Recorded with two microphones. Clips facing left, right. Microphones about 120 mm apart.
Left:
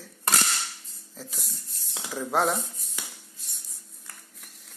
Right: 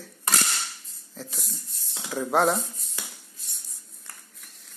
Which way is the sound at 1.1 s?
Centre (ahead or behind).